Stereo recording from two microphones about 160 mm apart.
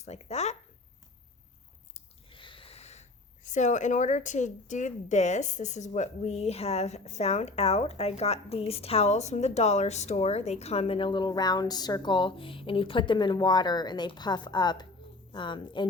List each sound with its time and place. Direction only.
0.0 s speech: 45° left (ahead or behind)
1.9 s a sound: 30° left (ahead or behind)
3.5 s a woman's voice: 50° left (ahead or behind); by 15.9 s 30° left (ahead or behind)